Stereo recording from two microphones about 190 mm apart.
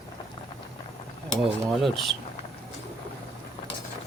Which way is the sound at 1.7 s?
Centre (ahead or behind).